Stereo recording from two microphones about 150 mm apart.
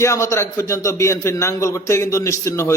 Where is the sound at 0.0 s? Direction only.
20° left (ahead or behind).